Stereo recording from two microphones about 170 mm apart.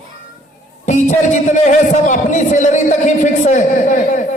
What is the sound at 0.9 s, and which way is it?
A man's voice, 45° left (ahead or behind).